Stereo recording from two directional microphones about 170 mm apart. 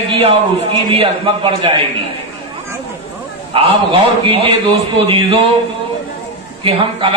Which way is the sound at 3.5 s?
30° right (ahead or behind).